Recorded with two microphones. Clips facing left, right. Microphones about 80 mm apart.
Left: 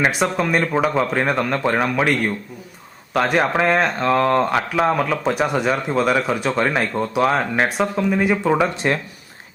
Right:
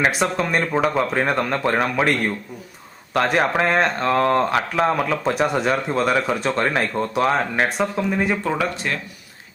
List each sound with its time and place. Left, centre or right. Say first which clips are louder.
0.0 s speech: left 1 dB; centre
8.4 s speech: left 5 dB; left